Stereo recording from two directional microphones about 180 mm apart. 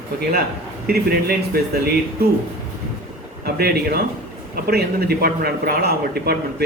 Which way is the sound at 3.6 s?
60° right (ahead or behind).